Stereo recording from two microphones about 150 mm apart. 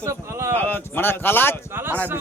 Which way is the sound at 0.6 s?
15° left (ahead or behind).